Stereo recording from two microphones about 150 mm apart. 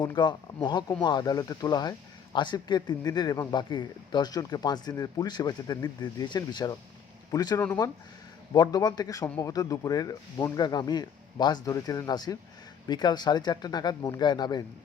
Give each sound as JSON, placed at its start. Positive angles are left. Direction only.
{"t": 0.0, "sound": "speech", "side_deg": 30}